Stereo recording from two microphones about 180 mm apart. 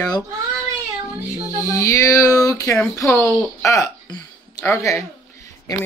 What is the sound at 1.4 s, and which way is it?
Speech, 20° left (ahead or behind).